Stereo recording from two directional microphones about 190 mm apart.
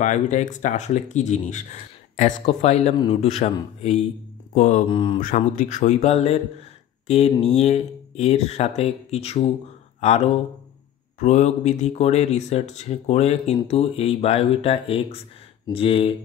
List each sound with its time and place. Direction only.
0.0 s speech: 40° left (ahead or behind)
4.8 s speech: 25° left (ahead or behind)
5.2 s speech: 45° left (ahead or behind)